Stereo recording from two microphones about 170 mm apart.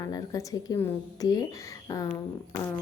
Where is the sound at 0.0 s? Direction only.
20° left (ahead or behind).